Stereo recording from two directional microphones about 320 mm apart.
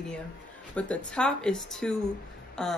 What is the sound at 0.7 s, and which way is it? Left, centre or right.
A woman's voice, centre.